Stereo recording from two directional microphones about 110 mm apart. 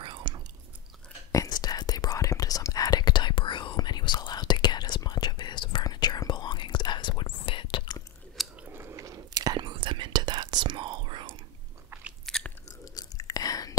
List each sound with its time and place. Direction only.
0.0 s chewing: 50° right (ahead or behind)
1.3 s whispering: 35° left (ahead or behind)
8.5 s whispering: 20° right (ahead or behind); by 11.4 s 50° right (ahead or behind)
11.9 s biting: 20° right (ahead or behind)
12.3 s chewing: 5° left (ahead or behind)
12.8 s chewing: 35° left (ahead or behind)